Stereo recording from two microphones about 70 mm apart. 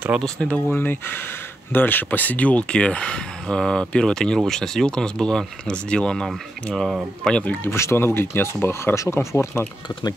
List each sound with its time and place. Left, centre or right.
0.2 s speech: centre
0.7 s speech: left; by 7.5 s centre
7.7 s speech: left
9.0 s speech: left